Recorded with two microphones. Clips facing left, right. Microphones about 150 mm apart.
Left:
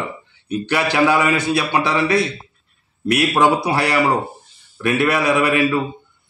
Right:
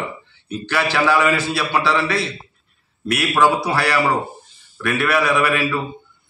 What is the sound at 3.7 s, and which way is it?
A man's voice, 20° left (ahead or behind).